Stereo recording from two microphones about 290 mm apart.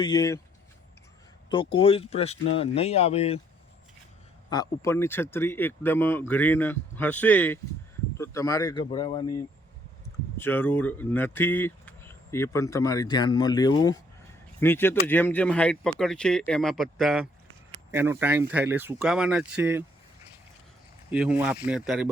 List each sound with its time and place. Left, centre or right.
0.0 s speech: centre
1.5 s speech: centre
4.4 s speech: centre
10.3 s speech: centre
21.1 s speech: centre